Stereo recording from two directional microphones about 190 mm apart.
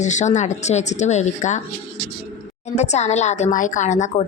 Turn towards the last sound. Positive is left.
turn(degrees=40)  # may be behind; listen again after turning